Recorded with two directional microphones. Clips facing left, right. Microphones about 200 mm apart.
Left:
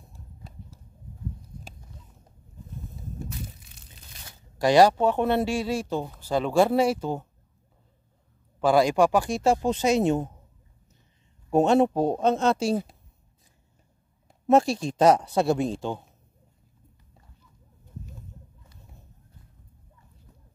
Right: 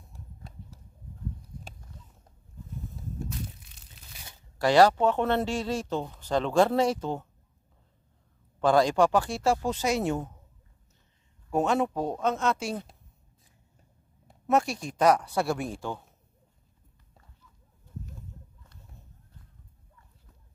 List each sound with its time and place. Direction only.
3.3 s crushing: centre (ahead or behind)
4.6 s speech: 15° left (ahead or behind)
8.5 s speech: 10° left (ahead or behind)
11.5 s a man's voice: 30° left (ahead or behind)
14.5 s speech: 30° left (ahead or behind)